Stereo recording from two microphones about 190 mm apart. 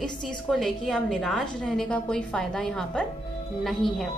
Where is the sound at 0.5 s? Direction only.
Centre (ahead or behind).